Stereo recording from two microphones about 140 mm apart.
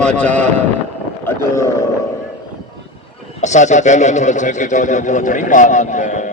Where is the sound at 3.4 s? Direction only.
60° left (ahead or behind).